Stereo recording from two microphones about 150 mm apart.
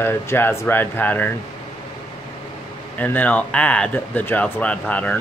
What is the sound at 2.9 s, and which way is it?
Speech, 10° left (ahead or behind).